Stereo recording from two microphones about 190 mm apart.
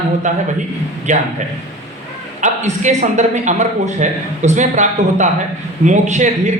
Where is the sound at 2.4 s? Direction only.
40° right (ahead or behind).